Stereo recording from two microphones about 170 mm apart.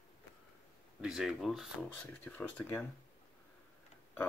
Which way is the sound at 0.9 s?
Centre (ahead or behind).